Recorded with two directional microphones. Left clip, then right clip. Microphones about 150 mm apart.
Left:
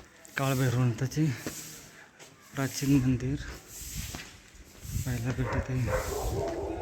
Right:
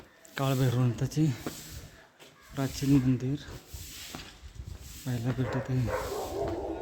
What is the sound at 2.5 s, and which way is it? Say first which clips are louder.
Speech: even; 10° right (ahead or behind).